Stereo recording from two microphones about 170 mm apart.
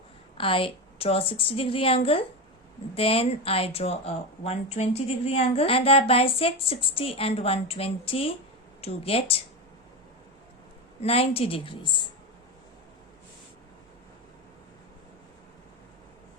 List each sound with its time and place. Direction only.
0.3 s speech: 30° left (ahead or behind)
11.0 s speech: 35° left (ahead or behind)